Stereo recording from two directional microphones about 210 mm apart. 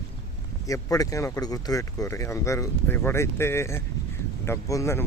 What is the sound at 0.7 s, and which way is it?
Speech, 15° left (ahead or behind).